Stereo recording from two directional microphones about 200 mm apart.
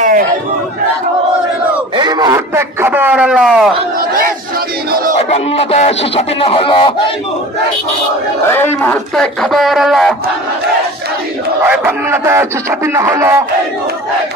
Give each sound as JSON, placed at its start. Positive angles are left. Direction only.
{"t": 2.0, "sound": "speech", "side_deg": -20}
{"t": 5.3, "sound": "speech", "side_deg": 30}
{"t": 8.5, "sound": "speech", "side_deg": 10}
{"t": 11.6, "sound": "speech", "side_deg": -10}